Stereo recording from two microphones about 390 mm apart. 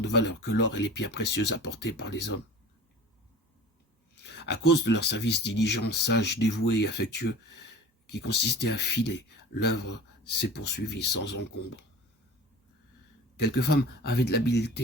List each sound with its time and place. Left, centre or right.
0.0 s speech: left
4.1 s speech: left
11.3 s speech: left
13.3 s speech: left